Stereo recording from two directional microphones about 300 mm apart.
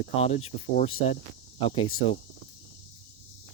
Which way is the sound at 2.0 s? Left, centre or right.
Centre.